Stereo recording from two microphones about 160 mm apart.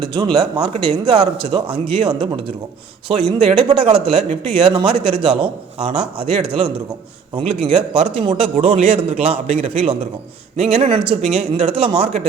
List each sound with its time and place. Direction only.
0.2 s speech: 20° right (ahead or behind)
0.6 s speech: 35° right (ahead or behind)
7.6 s speech: 40° right (ahead or behind)